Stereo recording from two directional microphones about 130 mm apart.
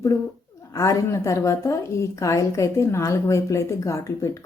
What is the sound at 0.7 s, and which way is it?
Speech, 25° left (ahead or behind).